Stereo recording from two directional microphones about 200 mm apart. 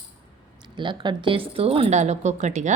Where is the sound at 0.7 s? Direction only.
25° right (ahead or behind).